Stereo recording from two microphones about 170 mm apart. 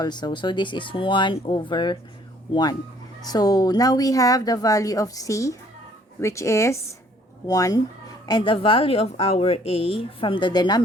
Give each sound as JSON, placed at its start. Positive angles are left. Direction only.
{"t": 0.0, "sound": "a woman's voice", "side_deg": 25}